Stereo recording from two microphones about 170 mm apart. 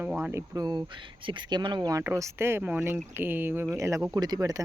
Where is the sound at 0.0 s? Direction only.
15° right (ahead or behind).